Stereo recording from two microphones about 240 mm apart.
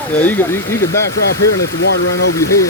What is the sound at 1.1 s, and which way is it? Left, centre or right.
Speech, left.